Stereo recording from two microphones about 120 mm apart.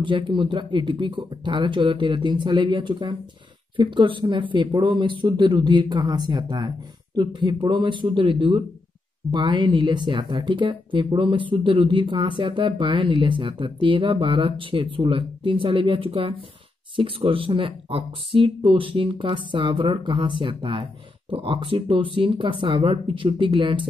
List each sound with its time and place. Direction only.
0.0 s speech: 45° right (ahead or behind)